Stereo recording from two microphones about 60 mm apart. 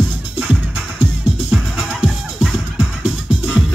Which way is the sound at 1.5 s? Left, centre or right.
Centre.